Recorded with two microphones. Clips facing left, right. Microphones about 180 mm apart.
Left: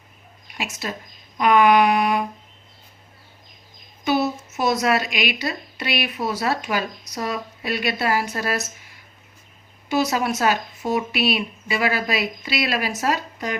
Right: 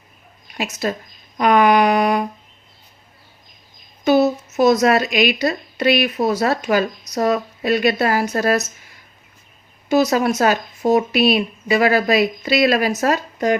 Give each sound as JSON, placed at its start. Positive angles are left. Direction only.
{"t": 0.5, "sound": "a sound", "side_deg": -40}
{"t": 4.0, "sound": "speech", "side_deg": -40}
{"t": 9.9, "sound": "speech", "side_deg": -45}